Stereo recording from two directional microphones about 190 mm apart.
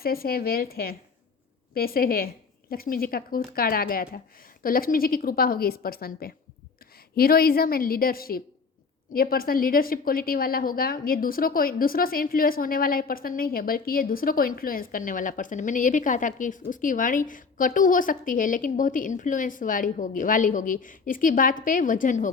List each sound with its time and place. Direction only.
0.0 s a woman's voice: 50° left (ahead or behind)